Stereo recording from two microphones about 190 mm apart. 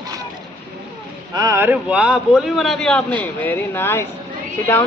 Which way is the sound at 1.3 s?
15° right (ahead or behind).